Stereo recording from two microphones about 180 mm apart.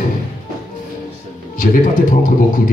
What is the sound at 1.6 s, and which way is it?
Speech, 50° left (ahead or behind).